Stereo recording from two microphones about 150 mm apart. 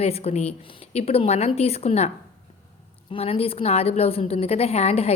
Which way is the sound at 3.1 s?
40° left (ahead or behind).